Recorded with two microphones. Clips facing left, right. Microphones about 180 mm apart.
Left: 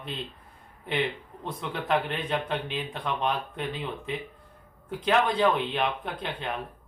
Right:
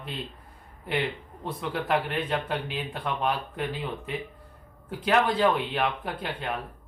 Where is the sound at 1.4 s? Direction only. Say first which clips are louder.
Right 2 dB; 5° right (ahead or behind).